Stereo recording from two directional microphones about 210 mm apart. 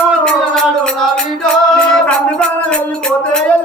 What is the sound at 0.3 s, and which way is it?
Music, 5° left (ahead or behind).